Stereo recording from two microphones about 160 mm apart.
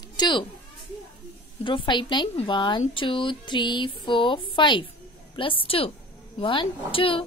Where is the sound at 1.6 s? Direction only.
30° left (ahead or behind).